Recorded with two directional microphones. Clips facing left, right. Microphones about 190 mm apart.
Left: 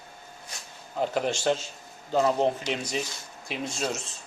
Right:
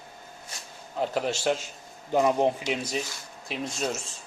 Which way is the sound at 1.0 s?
Centre (ahead or behind).